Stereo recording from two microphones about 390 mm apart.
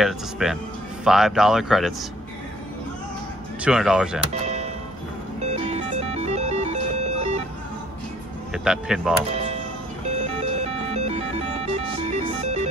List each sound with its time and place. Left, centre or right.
0.0 s speech: centre
3.6 s speech: centre
4.3 s music: centre
8.6 s speech: centre
9.3 s music: centre